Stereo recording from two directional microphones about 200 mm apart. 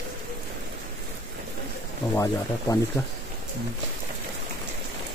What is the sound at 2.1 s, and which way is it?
Speech, 15° left (ahead or behind).